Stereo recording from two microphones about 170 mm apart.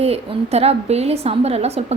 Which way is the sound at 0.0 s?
35° right (ahead or behind).